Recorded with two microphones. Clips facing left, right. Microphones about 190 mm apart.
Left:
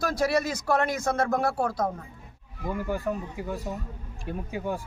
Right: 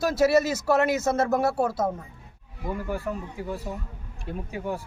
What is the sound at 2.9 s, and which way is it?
Speech, 15° left (ahead or behind).